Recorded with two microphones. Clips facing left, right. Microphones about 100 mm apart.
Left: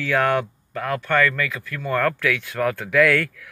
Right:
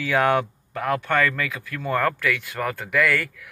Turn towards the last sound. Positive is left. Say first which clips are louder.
# left 4 dB
turn(degrees=-5)  # may be behind; listen again after turning